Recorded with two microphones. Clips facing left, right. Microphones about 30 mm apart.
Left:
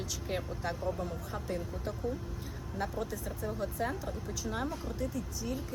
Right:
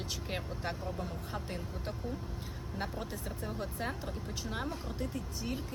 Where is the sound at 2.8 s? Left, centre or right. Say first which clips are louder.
Left 4 dB; right.